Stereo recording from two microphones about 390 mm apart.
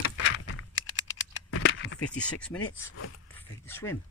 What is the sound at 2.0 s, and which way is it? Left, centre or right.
Speech, centre.